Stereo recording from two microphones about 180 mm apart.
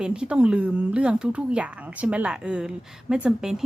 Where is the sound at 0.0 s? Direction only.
5° right (ahead or behind).